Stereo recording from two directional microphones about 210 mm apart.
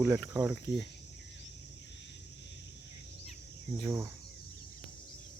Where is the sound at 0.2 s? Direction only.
15° right (ahead or behind).